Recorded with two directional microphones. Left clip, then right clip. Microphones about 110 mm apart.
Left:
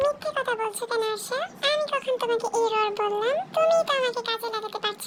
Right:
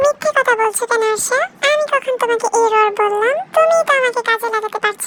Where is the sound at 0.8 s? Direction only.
45° right (ahead or behind).